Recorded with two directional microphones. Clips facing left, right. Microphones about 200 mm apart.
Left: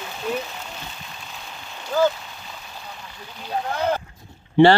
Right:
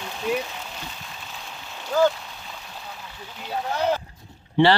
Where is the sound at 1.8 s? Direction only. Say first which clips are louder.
Even; centre (ahead or behind).